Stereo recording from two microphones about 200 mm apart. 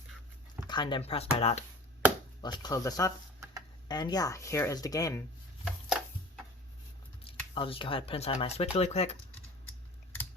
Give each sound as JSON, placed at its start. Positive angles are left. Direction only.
{"t": 0.7, "sound": "speech", "side_deg": 25}
{"t": 2.4, "sound": "speech", "side_deg": 20}
{"t": 5.6, "sound": "a sound", "side_deg": -5}
{"t": 7.5, "sound": "speech", "side_deg": 25}